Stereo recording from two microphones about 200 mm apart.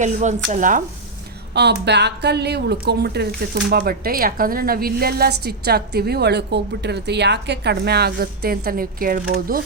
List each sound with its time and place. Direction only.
0.0 s speech: 35° right (ahead or behind)
1.5 s a woman's voice: 55° right (ahead or behind)